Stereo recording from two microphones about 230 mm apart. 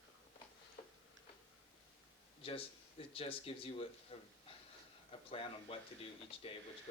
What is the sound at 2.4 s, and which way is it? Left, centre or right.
Speech, left.